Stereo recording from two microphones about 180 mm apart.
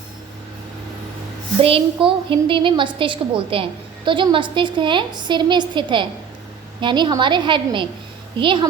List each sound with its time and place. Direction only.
1.6 s a woman's voice: 30° right (ahead or behind)